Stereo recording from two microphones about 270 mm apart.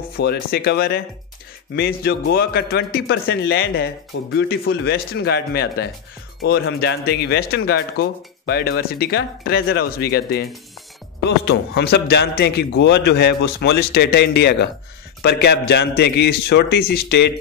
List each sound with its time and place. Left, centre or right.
0.2 s a man's voice: left